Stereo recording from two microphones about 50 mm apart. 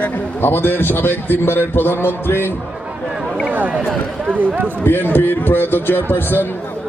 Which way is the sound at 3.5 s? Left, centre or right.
Right.